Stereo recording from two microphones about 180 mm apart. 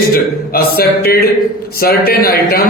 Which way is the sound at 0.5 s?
60° left (ahead or behind).